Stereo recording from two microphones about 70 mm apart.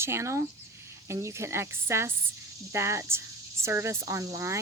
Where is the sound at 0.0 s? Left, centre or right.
Right.